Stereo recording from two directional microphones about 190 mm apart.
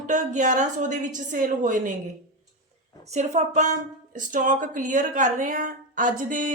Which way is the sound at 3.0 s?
35° right (ahead or behind).